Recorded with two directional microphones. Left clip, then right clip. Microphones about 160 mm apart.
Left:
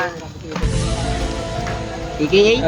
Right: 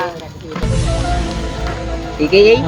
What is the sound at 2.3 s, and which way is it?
Speech, 20° left (ahead or behind).